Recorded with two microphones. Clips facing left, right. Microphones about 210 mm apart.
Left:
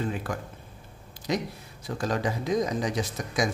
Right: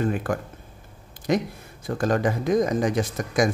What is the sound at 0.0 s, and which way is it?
Speech, 55° right (ahead or behind).